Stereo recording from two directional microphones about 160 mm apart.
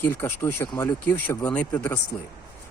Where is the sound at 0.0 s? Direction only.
15° left (ahead or behind).